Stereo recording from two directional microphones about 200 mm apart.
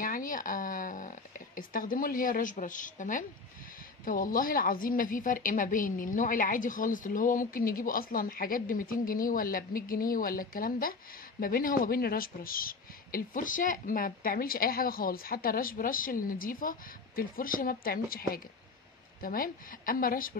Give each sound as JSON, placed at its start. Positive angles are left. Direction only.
{"t": 0.0, "sound": "a sound", "side_deg": 45}
{"t": 4.0, "sound": "a woman's voice", "side_deg": 45}
{"t": 19.2, "sound": "a woman's voice", "side_deg": 45}